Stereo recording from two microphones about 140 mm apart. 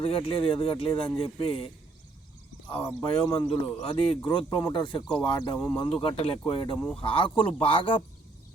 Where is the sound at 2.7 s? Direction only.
40° left (ahead or behind).